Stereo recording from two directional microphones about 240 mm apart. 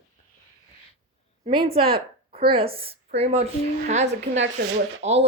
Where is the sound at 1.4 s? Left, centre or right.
Right.